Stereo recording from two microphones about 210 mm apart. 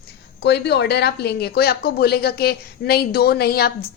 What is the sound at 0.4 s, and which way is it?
A woman's voice, 55° left (ahead or behind).